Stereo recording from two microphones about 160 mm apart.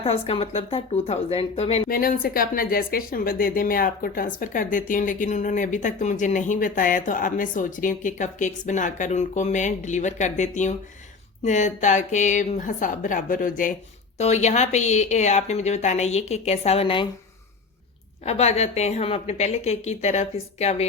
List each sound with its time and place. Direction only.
0.0 s speech: 35° left (ahead or behind)
1.9 s a woman's voice: 65° left (ahead or behind)
14.2 s a woman's voice: 45° left (ahead or behind)
18.3 s a woman's voice: 40° left (ahead or behind)